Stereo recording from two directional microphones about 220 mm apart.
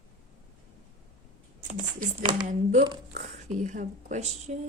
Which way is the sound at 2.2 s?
25° right (ahead or behind).